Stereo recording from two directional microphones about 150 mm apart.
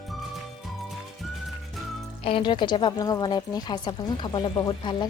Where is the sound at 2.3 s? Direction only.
35° left (ahead or behind).